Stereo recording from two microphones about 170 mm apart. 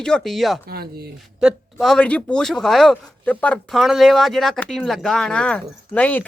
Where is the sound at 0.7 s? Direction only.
65° right (ahead or behind).